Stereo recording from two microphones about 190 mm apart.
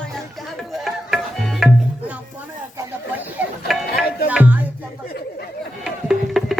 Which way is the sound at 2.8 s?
10° right (ahead or behind).